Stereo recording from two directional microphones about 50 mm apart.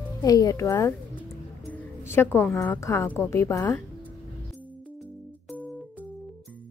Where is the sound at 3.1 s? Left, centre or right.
Left.